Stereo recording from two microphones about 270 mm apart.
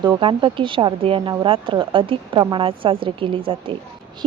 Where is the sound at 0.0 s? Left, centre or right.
Centre.